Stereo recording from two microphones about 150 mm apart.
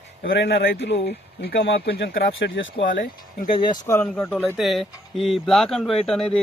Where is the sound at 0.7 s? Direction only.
90° left.